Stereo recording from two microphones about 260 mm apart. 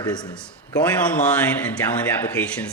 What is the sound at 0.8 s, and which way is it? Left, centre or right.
Speech, centre.